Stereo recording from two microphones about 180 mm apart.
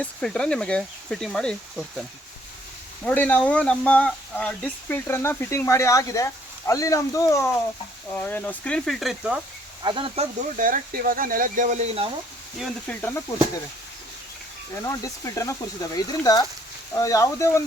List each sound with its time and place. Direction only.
0.0 s speech: 5° left (ahead or behind)
3.0 s speech: 10° left (ahead or behind)
9.8 s speech: 30° right (ahead or behind)
10.6 s speech: 50° right (ahead or behind)
12.9 s speech: 10° left (ahead or behind)
14.8 s speech: 15° left (ahead or behind)